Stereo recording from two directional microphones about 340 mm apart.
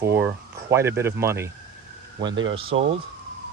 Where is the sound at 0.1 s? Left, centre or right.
Centre.